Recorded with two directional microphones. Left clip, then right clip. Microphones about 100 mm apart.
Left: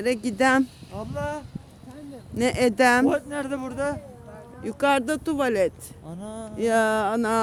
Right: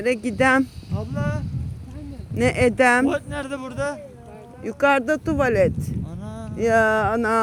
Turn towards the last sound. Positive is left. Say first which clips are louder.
# right 3 dB
turn(degrees=25)  # may be behind; listen again after turning